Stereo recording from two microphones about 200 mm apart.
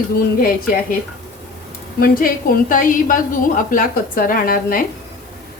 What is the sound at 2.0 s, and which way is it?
A woman's voice, 45° left (ahead or behind).